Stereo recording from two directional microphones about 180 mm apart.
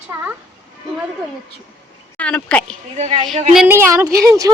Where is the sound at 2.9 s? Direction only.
35° right (ahead or behind).